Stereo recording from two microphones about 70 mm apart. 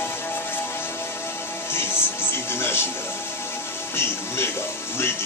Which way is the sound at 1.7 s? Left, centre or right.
Left.